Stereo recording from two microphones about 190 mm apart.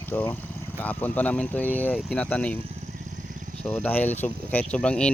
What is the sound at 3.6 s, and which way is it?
Speech, 10° left (ahead or behind).